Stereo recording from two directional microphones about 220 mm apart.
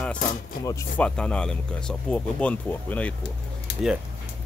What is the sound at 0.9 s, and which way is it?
Speech, 5° left (ahead or behind).